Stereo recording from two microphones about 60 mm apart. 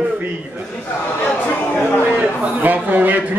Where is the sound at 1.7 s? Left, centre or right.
Left.